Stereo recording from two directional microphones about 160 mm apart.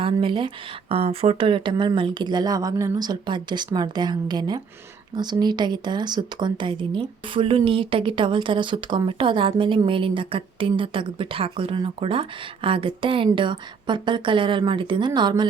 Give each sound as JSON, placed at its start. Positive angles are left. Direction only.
{"t": 0.0, "sound": "speech", "side_deg": -35}